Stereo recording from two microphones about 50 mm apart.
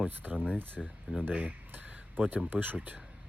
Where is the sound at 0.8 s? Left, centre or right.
Centre.